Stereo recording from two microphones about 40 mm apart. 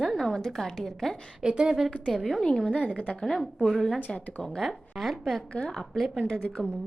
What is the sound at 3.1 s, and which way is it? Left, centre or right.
Speech, centre.